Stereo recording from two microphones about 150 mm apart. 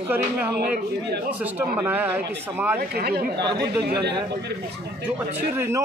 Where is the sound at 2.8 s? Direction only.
90° right.